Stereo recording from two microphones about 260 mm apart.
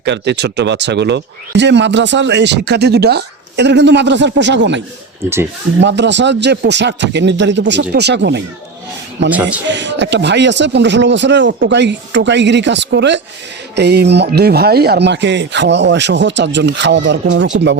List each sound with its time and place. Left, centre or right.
0.0 s speech: right
5.8 s speech: right
9.3 s a man's voice: centre
9.6 s speech: right